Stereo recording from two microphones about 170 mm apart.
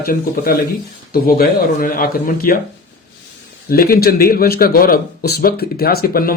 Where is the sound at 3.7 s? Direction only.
60° left (ahead or behind).